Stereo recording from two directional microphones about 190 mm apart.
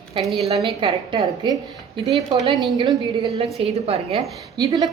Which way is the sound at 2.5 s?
Centre (ahead or behind).